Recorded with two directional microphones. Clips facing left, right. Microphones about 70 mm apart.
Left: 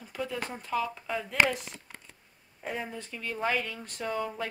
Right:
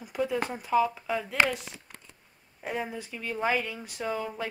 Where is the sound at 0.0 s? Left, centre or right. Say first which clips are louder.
Right 6 dB; centre.